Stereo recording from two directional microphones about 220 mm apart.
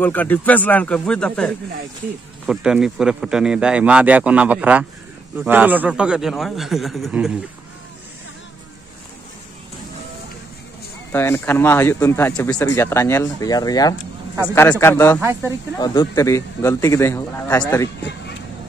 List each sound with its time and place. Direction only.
0.0 s speech: 10° left (ahead or behind)
11.1 s speech: 10° left (ahead or behind)